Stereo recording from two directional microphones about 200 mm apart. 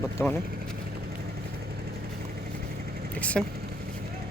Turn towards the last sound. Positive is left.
turn(degrees=5)  # may be behind; listen again after turning